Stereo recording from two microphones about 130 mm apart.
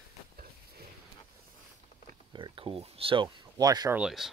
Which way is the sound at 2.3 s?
40° right (ahead or behind).